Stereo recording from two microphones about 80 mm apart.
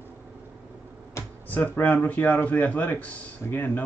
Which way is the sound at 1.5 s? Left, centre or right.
Left.